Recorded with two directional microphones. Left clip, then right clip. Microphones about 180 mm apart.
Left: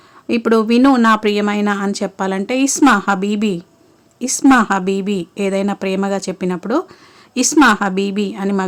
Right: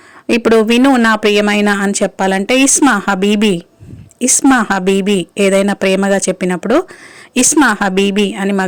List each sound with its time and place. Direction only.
0.3 s a woman's voice: 20° right (ahead or behind)